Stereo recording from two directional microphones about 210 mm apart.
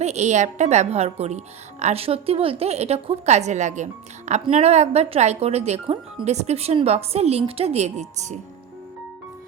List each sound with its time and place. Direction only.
0.0 s a woman's voice: 30° right (ahead or behind)